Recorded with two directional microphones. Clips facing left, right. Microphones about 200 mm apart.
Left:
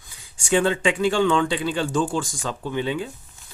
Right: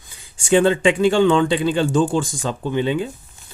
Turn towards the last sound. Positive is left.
turn(degrees=-25)  # may be behind; listen again after turning